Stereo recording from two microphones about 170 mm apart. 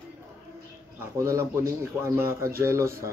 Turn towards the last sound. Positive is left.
turn(degrees=-15)  # may be behind; listen again after turning